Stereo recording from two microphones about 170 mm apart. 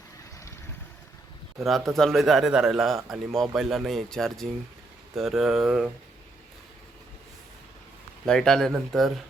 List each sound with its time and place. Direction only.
1.6 s a man's voice: centre (ahead or behind)
8.2 s a man's voice: 5° left (ahead or behind)